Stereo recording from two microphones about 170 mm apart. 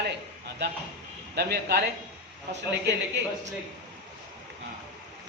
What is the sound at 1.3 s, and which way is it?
Speech, 70° right (ahead or behind).